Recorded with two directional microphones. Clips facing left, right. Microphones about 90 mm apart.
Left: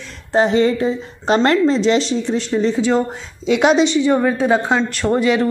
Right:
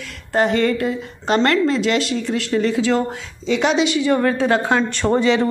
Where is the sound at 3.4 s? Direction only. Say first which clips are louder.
Left 4 dB; 55° left (ahead or behind).